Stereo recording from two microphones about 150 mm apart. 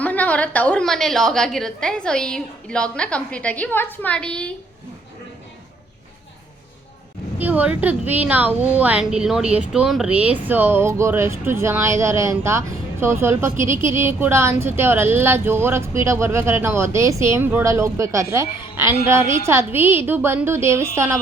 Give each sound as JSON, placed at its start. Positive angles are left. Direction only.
{"t": 0.0, "sound": "a woman's voice", "side_deg": 10}
{"t": 7.3, "sound": "a woman's voice", "side_deg": -10}